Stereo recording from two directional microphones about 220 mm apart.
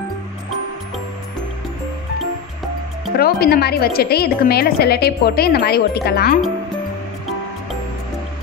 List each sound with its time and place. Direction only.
3.2 s a woman's voice: 45° left (ahead or behind)